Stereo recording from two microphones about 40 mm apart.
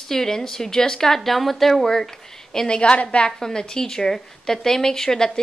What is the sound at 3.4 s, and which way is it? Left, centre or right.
A woman's voice, centre.